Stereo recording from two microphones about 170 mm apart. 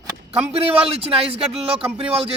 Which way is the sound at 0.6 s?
35° right (ahead or behind).